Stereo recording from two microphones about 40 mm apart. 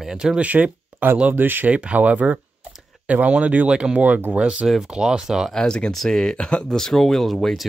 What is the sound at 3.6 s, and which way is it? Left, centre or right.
Speech, right.